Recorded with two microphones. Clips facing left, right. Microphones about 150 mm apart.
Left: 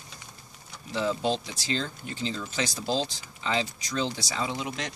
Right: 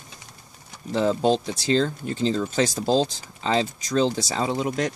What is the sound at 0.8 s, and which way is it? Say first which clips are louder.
Speech: right 7 dB; 45° right (ahead or behind).